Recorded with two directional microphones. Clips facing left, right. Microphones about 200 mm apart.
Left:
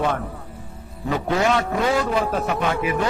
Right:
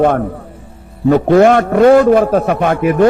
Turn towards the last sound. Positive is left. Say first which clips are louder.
# right 10 dB
turn(degrees=-55)  # may be behind; listen again after turning